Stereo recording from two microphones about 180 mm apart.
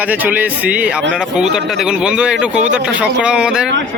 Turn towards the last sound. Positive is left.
turn(degrees=-5)  # may be behind; listen again after turning